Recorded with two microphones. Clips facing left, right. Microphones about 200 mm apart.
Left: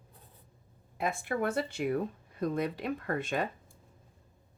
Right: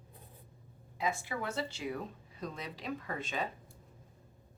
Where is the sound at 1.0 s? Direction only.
55° left (ahead or behind).